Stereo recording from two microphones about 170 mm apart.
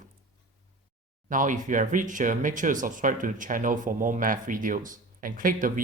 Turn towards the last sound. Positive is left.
turn(degrees=-55)  # may be behind; listen again after turning